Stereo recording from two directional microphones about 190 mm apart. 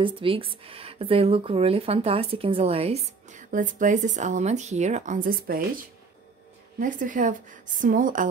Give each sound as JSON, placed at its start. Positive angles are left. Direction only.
{"t": 0.0, "sound": "speech", "side_deg": -30}
{"t": 6.8, "sound": "speech", "side_deg": -45}